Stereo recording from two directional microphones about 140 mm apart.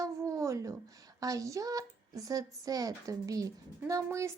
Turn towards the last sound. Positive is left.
turn(degrees=-20)  # may be behind; listen again after turning